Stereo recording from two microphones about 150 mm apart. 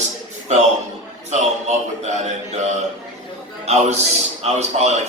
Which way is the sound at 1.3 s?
50° right (ahead or behind).